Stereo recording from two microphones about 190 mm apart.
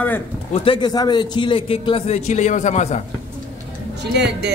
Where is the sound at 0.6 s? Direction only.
25° left (ahead or behind).